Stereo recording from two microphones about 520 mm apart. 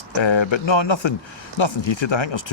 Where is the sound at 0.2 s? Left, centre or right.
Left.